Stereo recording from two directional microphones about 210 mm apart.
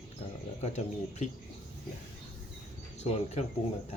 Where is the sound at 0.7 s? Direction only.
35° left (ahead or behind).